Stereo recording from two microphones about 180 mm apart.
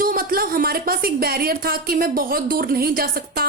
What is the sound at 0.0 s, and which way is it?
A child's voice, 55° right (ahead or behind).